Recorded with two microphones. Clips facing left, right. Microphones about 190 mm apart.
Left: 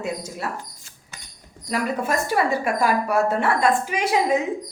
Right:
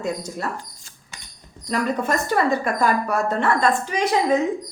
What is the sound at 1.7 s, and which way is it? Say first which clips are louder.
A woman's voice: right 1 dB; 10° left (ahead or behind).